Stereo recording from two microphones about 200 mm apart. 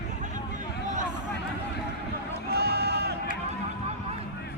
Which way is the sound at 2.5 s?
50° right (ahead or behind).